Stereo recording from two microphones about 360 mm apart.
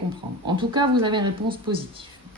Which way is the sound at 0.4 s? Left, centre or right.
Centre.